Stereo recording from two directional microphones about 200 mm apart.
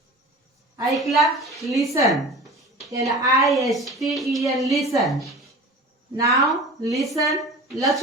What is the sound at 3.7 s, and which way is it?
A woman's voice, centre (ahead or behind).